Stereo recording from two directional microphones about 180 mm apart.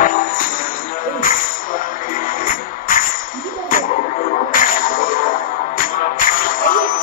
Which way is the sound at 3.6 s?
50° left (ahead or behind).